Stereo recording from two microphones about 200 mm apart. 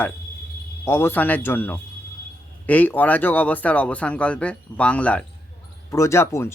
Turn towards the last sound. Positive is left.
turn(degrees=15)  # may be behind; listen again after turning